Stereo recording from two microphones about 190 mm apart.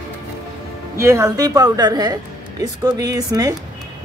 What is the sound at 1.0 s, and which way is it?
A woman's voice, 15° right (ahead or behind).